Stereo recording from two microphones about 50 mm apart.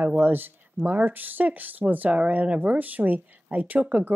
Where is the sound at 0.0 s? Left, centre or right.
Right.